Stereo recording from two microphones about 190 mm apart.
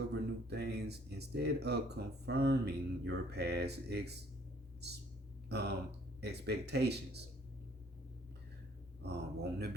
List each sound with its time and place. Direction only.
0.1 s speech: 60° right (ahead or behind)
5.5 s a sound: 60° right (ahead or behind)
6.1 s speech: 60° right (ahead or behind)
9.0 s speech: 60° right (ahead or behind)